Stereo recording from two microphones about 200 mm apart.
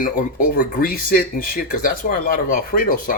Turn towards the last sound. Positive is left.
turn(degrees=45)  # may be behind; listen again after turning